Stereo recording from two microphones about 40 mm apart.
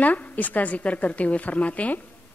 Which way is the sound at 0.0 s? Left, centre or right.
Left.